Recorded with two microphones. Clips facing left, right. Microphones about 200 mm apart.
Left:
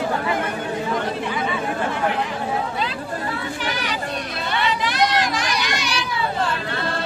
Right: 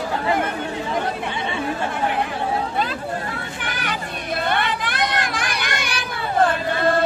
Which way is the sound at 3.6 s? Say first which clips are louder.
Even; 55° right (ahead or behind).